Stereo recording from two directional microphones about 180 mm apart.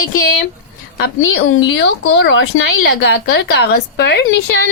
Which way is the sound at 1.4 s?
75° left (ahead or behind).